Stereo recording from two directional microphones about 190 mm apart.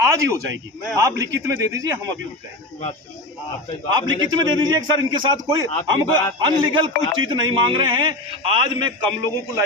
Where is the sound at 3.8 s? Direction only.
20° right (ahead or behind).